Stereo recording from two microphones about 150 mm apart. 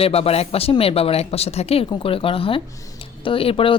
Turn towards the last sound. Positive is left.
turn(degrees=35)  # may be behind; listen again after turning